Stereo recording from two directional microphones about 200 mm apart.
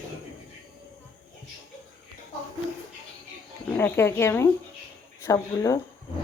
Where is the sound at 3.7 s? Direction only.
10° left (ahead or behind).